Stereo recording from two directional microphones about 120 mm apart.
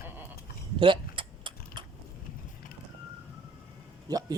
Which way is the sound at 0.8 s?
45° right (ahead or behind).